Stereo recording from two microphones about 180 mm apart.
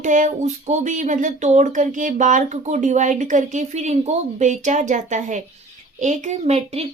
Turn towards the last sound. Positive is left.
turn(degrees=-35)  # may be behind; listen again after turning